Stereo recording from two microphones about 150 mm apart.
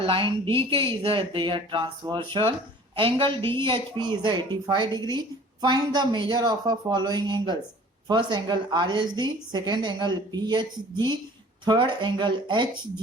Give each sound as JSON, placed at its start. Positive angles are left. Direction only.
{"t": 0.0, "sound": "a woman's voice", "side_deg": -35}